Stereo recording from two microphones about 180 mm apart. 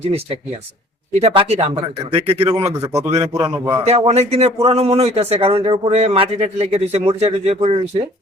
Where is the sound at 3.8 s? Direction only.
35° right (ahead or behind).